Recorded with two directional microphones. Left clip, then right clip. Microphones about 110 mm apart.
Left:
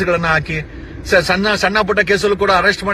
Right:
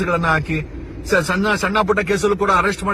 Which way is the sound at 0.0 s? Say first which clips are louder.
Left 3 dB; 20° right (ahead or behind).